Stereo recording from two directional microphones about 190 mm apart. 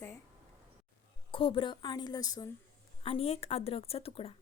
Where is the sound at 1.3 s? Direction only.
25° left (ahead or behind).